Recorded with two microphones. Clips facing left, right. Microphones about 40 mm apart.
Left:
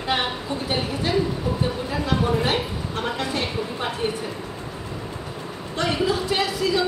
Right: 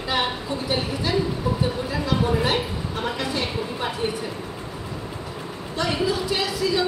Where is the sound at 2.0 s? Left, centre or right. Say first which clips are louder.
Even; left.